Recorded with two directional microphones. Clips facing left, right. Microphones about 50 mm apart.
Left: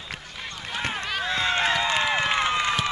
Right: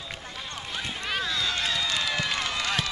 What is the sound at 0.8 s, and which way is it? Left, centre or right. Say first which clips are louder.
Run: left 3 dB; left.